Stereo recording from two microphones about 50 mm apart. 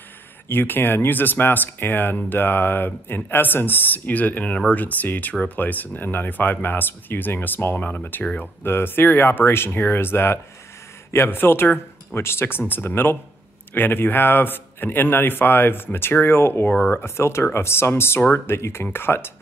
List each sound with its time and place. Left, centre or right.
0.5 s a man's voice: left
16.6 s speech: left
17.0 s a man's voice: left